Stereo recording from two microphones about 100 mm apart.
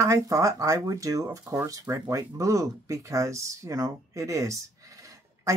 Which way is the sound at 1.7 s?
35° right (ahead or behind).